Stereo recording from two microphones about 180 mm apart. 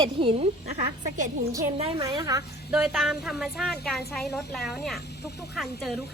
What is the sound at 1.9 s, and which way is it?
Speech, 20° right (ahead or behind).